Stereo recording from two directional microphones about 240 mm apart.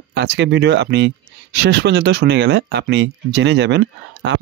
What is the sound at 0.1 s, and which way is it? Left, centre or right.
Speech, right.